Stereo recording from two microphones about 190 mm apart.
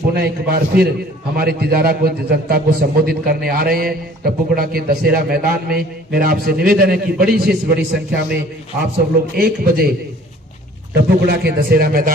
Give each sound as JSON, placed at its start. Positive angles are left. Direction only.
{"t": 0.1, "sound": "a man's voice", "side_deg": -55}
{"t": 11.1, "sound": "a man's voice", "side_deg": -60}